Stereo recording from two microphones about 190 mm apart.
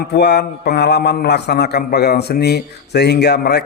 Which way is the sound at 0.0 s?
60° left (ahead or behind).